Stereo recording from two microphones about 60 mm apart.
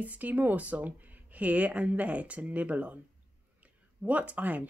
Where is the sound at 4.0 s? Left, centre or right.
Right.